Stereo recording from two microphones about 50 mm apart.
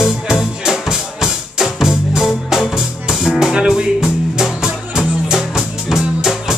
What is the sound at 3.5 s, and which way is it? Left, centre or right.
Music, centre.